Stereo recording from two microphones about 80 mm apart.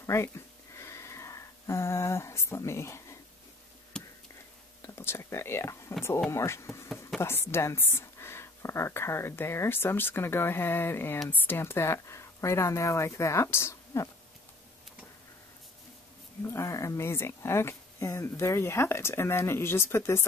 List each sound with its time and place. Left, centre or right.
0.0 s speech: left
0.7 s a sound: left
4.8 s speech: left
16.4 s speech: left